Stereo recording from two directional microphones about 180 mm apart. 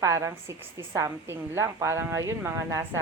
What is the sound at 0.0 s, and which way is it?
A woman's voice, 15° right (ahead or behind).